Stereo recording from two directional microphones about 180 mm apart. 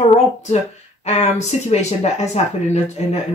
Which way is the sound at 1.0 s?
40° left (ahead or behind).